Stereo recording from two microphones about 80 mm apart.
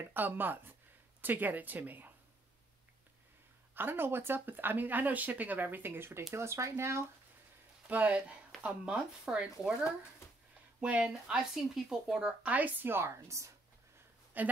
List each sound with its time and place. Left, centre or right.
0.0 s speech: right
3.7 s speech: right
7.9 s speech: centre
10.8 s speech: centre; by 13.5 s right
14.3 s speech: right